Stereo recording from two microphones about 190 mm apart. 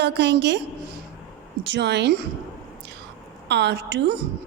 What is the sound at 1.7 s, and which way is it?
Speech, 65° right (ahead or behind).